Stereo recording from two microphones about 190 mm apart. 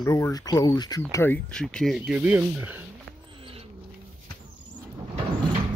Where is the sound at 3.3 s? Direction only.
30° right (ahead or behind).